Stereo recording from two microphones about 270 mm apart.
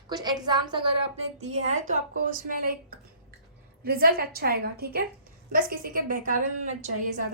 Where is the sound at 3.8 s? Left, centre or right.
Right.